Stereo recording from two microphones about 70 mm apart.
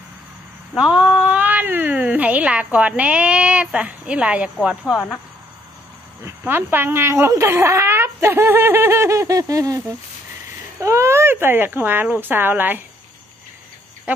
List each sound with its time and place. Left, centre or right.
0.7 s speech: centre
1.3 s speech: right
6.2 s speech: right
10.8 s speech: right
14.1 s cricket: right